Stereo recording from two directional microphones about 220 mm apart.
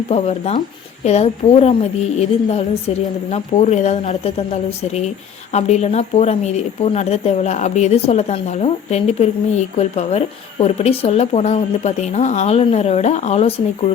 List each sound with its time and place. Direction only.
0.1 s a woman's voice: 30° left (ahead or behind)